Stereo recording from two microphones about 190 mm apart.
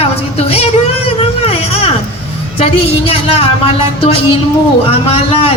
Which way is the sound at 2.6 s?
30° left (ahead or behind).